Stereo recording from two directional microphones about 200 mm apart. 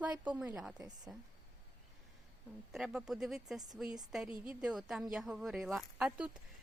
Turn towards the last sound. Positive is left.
turn(degrees=-5)  # may be behind; listen again after turning